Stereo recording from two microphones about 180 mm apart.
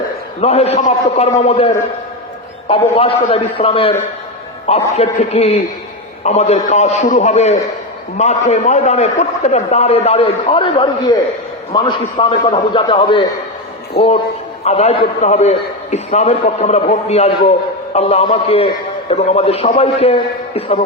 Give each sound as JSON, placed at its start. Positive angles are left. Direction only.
{"t": 0.4, "sound": "a man's voice", "side_deg": 35}
{"t": 14.0, "sound": "a man's voice", "side_deg": 60}
{"t": 14.6, "sound": "a man's voice", "side_deg": 35}